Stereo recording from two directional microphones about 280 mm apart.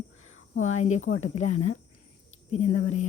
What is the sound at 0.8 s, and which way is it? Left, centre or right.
Speech, left.